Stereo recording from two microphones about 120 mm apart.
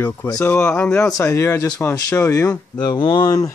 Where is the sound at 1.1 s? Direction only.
25° left (ahead or behind).